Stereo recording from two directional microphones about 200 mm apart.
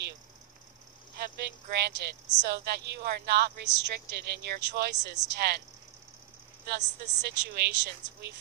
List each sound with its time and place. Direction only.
1.2 s a woman's voice: 55° right (ahead or behind)
6.7 s a woman's voice: 60° right (ahead or behind)